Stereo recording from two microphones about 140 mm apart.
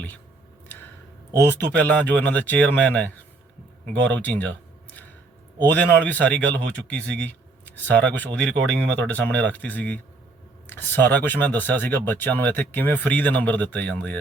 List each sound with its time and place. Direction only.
1.5 s speech: 10° left (ahead or behind)
4.1 s a sound: 10° left (ahead or behind)
5.6 s speech: 10° left (ahead or behind)